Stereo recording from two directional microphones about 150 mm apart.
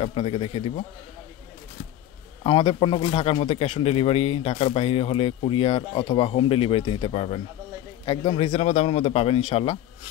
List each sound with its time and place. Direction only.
0.0 s speech: 40° left (ahead or behind)
2.4 s speech: 35° left (ahead or behind)
8.0 s a man's voice: 30° left (ahead or behind)
8.4 s speech: 45° left (ahead or behind)